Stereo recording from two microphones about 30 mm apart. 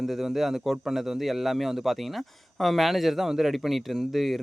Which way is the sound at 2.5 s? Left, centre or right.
Centre.